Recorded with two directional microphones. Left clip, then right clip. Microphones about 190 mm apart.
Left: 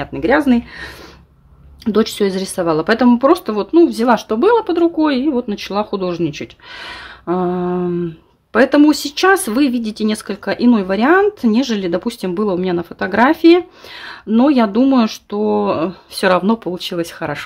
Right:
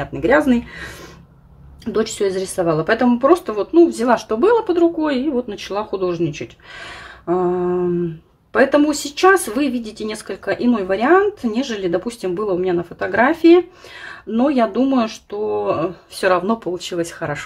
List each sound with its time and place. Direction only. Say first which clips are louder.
0.0 s speech: left 1 dB; 30° left (ahead or behind)
1.9 s speech: left 3 dB; 40° left (ahead or behind)